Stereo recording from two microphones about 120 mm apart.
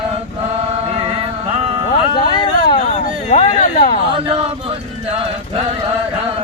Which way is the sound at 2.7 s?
55° left (ahead or behind).